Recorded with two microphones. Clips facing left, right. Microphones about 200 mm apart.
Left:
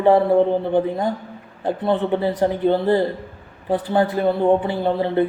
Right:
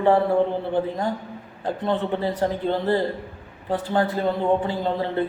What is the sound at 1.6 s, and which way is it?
A man's voice, 15° left (ahead or behind).